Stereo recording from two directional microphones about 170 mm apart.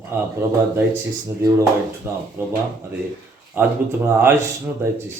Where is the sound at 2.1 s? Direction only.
15° right (ahead or behind).